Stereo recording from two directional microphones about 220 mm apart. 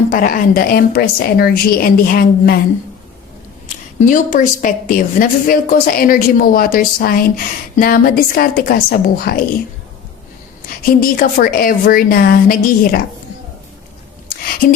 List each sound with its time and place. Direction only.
0.1 s a woman's voice: 40° left (ahead or behind)
4.0 s a woman's voice: 35° left (ahead or behind)
11.0 s a woman's voice: 40° left (ahead or behind)